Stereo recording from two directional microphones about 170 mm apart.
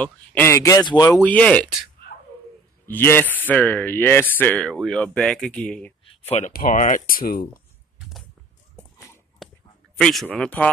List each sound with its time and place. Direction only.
0.0 s speech: 10° left (ahead or behind)
1.2 s speech: 10° left (ahead or behind)
2.9 s speech: 10° left (ahead or behind)
6.0 s a sound: 40° left (ahead or behind)
6.5 s speech: 50° left (ahead or behind)
8.7 s dog: 15° left (ahead or behind)
9.4 s a sound: centre (ahead or behind)
9.9 s speech: 5° left (ahead or behind)